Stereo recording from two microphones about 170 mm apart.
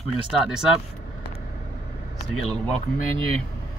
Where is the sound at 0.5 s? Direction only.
5° right (ahead or behind).